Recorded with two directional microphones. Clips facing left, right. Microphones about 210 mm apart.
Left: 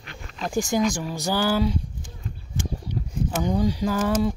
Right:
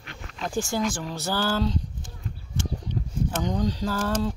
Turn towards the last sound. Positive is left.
turn(degrees=15)  # may be behind; listen again after turning